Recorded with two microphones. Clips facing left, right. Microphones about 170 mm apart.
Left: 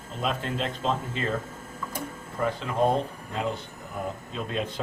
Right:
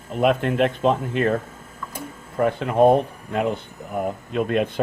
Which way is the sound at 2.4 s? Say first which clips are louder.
Right 8 dB; 60° right (ahead or behind).